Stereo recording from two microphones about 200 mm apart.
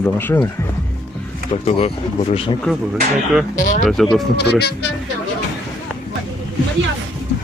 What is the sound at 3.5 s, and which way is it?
Speech, 40° left (ahead or behind).